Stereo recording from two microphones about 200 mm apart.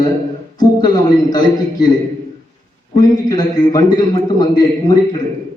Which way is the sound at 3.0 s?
20° left (ahead or behind).